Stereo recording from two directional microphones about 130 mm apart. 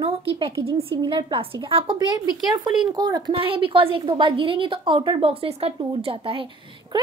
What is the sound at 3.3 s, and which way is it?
A woman's voice, 45° right (ahead or behind).